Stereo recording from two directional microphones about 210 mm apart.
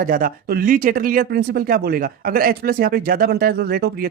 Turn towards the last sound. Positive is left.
turn(degrees=-45)  # may be behind; listen again after turning